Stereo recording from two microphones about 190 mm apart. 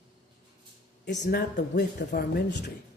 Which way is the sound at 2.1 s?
60° left (ahead or behind).